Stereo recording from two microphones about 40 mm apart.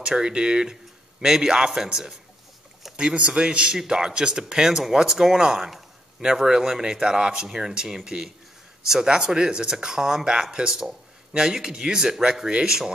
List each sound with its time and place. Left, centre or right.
0.0 s speech: centre
3.0 s a man's voice: right